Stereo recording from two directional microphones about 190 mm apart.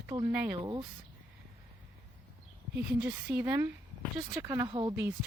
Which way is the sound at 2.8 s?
5° right (ahead or behind).